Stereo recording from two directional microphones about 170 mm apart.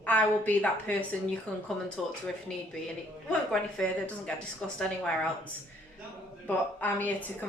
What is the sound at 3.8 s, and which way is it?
A woman's voice, 5° left (ahead or behind).